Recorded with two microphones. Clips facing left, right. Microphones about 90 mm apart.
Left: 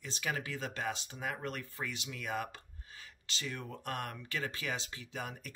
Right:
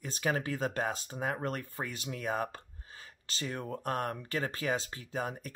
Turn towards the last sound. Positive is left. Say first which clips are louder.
# right 6 dB
turn(degrees=-35)  # may be behind; listen again after turning